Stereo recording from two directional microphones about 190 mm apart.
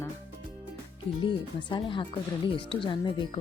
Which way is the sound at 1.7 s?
25° left (ahead or behind).